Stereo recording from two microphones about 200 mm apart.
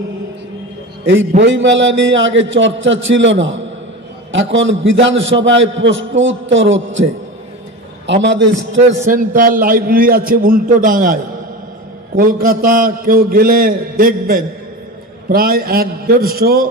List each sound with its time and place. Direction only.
1.4 s a man's voice: 65° right (ahead or behind)
8.1 s a man's voice: 60° right (ahead or behind)
9.0 s a man's voice: 45° right (ahead or behind)
12.2 s a man's voice: 45° right (ahead or behind)